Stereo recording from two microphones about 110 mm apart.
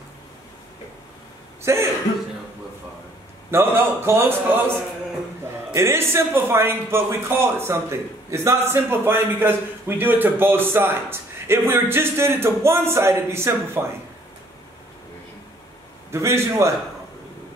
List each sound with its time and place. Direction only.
1.6 s speech: 25° right (ahead or behind)
3.5 s a man's voice: 20° right (ahead or behind)
5.7 s a man's voice: 25° right (ahead or behind)
16.1 s a man's voice: 25° right (ahead or behind)